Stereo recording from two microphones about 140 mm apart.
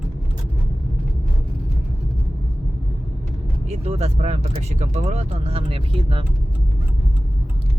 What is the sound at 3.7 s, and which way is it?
Speech, 50° right (ahead or behind).